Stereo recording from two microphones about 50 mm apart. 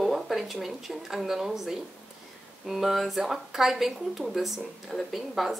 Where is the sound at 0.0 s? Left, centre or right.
Centre.